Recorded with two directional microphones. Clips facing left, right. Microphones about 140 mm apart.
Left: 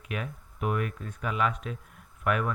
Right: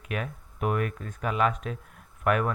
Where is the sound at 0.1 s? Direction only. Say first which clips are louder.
Right 2 dB; 50° right (ahead or behind).